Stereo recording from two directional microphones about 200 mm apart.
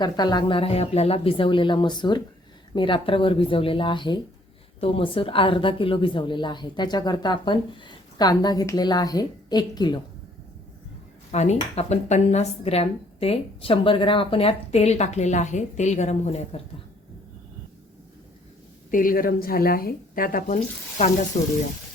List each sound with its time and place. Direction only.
0.0 s a woman's voice: 20° left (ahead or behind)
11.3 s speech: 35° left (ahead or behind)
18.9 s speech: 45° left (ahead or behind)